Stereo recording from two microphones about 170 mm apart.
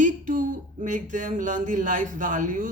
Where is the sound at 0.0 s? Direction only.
50° right (ahead or behind).